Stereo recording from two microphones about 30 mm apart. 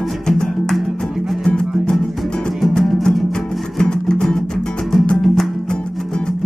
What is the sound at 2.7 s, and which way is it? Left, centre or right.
Music, centre.